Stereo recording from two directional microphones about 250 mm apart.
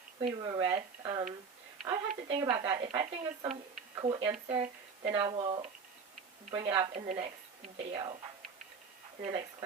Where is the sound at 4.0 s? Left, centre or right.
Centre.